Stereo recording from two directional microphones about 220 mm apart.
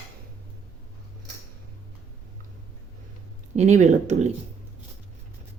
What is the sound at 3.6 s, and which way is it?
Speech, 35° right (ahead or behind).